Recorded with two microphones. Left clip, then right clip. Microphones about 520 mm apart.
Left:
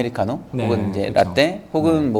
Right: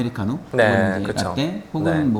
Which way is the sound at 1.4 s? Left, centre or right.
Left.